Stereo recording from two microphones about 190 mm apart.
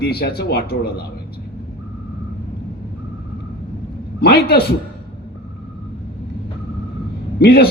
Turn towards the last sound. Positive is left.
turn(degrees=55)  # may be behind; listen again after turning